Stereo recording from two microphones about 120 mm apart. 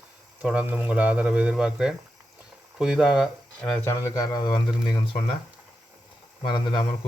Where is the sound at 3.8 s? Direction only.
30° left (ahead or behind).